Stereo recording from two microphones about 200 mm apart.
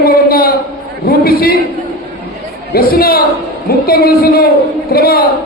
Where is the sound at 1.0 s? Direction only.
50° left (ahead or behind).